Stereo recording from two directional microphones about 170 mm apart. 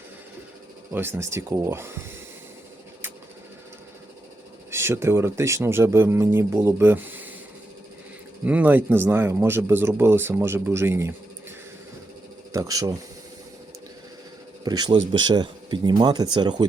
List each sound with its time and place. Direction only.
0.9 s speech: 15° right (ahead or behind)
4.7 s speech: 15° right (ahead or behind)
8.4 s speech: 10° right (ahead or behind)
12.5 s speech: 20° right (ahead or behind)
14.6 s speech: 25° right (ahead or behind)